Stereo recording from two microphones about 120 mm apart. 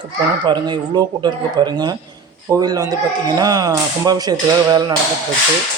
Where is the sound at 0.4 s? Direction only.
35° right (ahead or behind).